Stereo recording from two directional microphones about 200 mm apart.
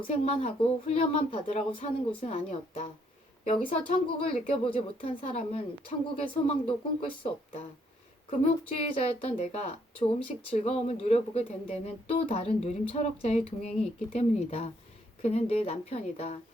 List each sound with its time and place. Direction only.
0.1 s a woman's voice: 30° left (ahead or behind)